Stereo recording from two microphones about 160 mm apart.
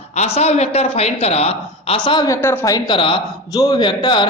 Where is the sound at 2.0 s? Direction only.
25° left (ahead or behind).